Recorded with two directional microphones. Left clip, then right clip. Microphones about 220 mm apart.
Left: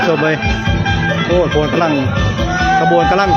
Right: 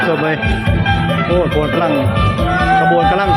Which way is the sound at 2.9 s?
20° left (ahead or behind).